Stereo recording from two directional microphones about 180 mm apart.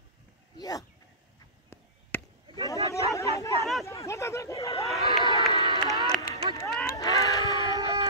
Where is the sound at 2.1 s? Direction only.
10° left (ahead or behind).